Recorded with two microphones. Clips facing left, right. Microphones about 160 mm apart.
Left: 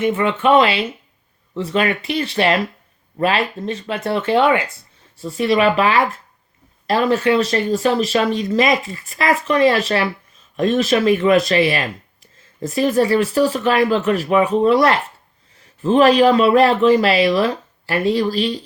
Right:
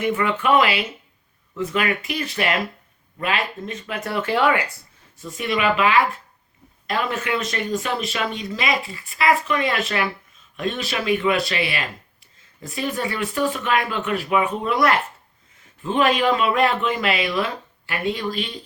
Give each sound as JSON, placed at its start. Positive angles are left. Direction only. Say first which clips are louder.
{"t": 0.0, "sound": "speech", "louder": "left 4 dB", "side_deg": 25}